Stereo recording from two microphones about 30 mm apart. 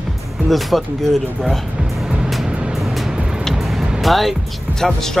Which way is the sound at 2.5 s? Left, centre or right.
Right.